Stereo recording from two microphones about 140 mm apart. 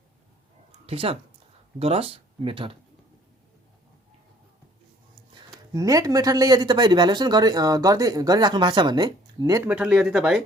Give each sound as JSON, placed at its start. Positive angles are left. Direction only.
{"t": 0.9, "sound": "speech", "side_deg": -40}
{"t": 5.3, "sound": "speech", "side_deg": -25}
{"t": 9.6, "sound": "speech", "side_deg": -5}